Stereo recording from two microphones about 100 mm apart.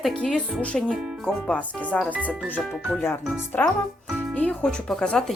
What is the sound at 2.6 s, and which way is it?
Speech, 5° right (ahead or behind).